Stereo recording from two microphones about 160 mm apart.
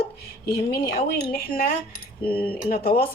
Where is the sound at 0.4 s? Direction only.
75° left (ahead or behind).